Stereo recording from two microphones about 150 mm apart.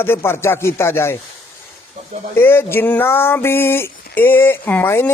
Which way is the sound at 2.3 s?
15° left (ahead or behind).